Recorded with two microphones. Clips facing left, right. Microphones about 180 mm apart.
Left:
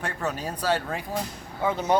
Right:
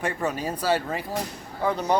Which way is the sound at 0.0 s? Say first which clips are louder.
Right 3 dB; 10° right (ahead or behind).